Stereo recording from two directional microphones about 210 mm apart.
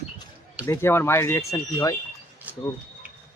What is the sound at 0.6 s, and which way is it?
Speech, 10° left (ahead or behind).